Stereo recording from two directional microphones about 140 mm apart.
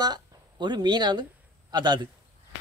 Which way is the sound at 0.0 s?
30° right (ahead or behind).